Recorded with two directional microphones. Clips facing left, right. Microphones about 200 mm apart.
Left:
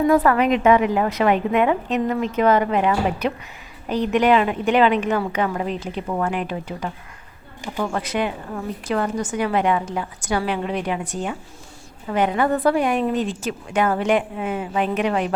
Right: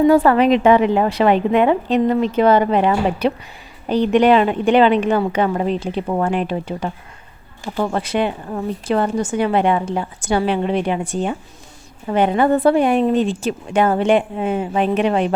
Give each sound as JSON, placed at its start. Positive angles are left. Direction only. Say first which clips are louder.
{"t": 0.0, "sound": "a woman's voice", "louder": "right 4 dB", "side_deg": -30}
{"t": 7.9, "sound": "speech", "louder": "right 4 dB", "side_deg": -30}